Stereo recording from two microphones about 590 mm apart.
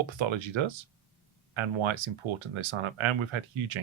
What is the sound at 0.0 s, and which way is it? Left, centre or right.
Speech, right.